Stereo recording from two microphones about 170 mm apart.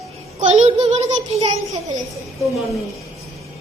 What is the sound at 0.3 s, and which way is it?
A child's voice, 40° right (ahead or behind).